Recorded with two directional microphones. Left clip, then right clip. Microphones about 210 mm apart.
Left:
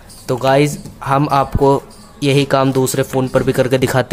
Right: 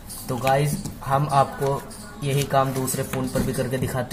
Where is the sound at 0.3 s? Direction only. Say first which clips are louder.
Left 9 dB; 40° left (ahead or behind).